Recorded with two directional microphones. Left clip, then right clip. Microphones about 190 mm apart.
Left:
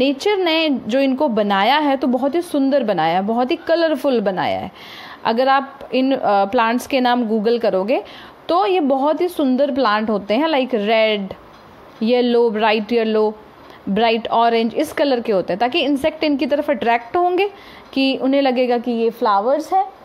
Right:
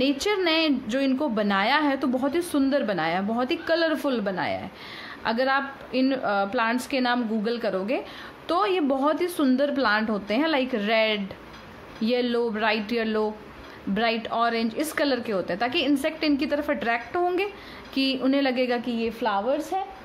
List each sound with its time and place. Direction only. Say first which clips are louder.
0.0 s a woman's voice: left 7 dB; 25° left (ahead or behind)
19.2 s a woman's voice: left 8 dB; 5° left (ahead or behind)